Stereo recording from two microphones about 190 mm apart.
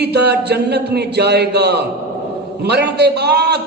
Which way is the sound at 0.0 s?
60° right (ahead or behind).